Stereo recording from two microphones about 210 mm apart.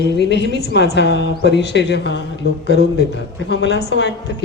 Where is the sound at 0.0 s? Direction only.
55° left (ahead or behind).